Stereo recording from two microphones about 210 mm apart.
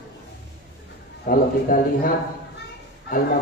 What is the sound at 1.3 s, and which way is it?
Speech, 40° left (ahead or behind).